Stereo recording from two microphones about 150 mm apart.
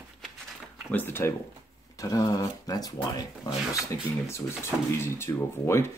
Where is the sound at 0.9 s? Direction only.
15° left (ahead or behind).